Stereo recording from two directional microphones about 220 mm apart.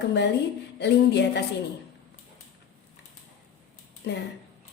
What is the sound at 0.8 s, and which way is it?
Speech, 50° left (ahead or behind).